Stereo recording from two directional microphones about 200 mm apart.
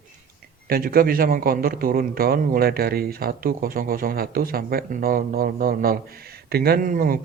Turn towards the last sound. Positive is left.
turn(degrees=-45)  # may be behind; listen again after turning